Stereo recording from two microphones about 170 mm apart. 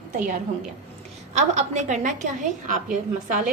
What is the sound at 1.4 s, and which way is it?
A woman's voice, 45° right (ahead or behind).